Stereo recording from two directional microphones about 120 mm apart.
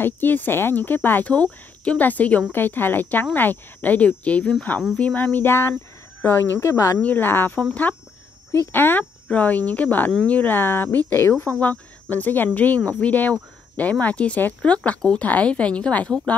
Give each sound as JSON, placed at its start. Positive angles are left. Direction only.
{"t": 0.0, "sound": "speech", "side_deg": 15}